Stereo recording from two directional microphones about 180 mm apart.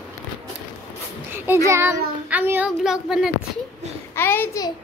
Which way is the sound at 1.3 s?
10° right (ahead or behind).